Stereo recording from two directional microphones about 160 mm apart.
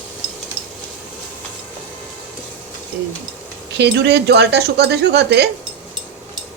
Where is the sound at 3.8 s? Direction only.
90° right.